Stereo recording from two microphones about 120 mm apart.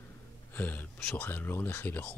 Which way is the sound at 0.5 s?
15° left (ahead or behind).